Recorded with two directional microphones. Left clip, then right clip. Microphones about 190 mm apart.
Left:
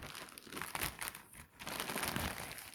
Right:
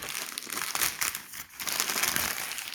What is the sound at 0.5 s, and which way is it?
Crumpling, 25° left (ahead or behind).